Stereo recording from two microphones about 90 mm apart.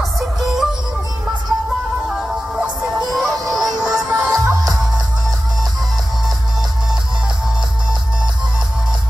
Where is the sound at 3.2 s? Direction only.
Centre (ahead or behind).